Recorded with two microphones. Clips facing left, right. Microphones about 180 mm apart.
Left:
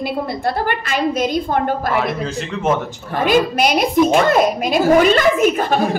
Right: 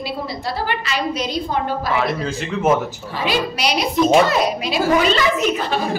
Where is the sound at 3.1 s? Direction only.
50° left (ahead or behind).